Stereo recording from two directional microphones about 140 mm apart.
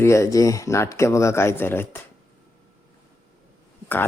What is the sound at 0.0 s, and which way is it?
Speech, 20° left (ahead or behind).